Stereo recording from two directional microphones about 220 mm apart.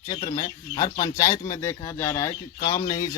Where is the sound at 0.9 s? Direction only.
15° left (ahead or behind).